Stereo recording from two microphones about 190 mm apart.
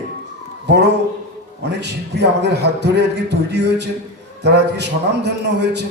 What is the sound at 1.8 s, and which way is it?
A man's voice, 65° right (ahead or behind).